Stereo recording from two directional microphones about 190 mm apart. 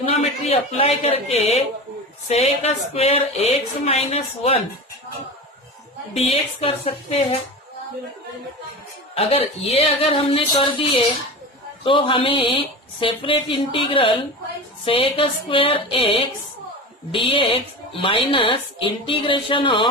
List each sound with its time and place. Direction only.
0.1 s speech: 35° left (ahead or behind)
6.1 s speech: 30° left (ahead or behind)
9.1 s speech: 30° left (ahead or behind)